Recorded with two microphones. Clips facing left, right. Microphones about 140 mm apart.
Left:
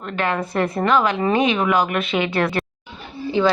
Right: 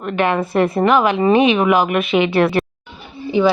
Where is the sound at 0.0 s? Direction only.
20° right (ahead or behind).